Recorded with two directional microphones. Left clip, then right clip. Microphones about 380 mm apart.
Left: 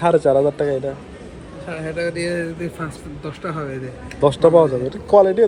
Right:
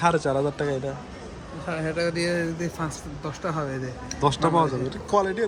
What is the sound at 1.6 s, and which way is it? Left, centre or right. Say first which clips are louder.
A man's voice: left 2 dB; right.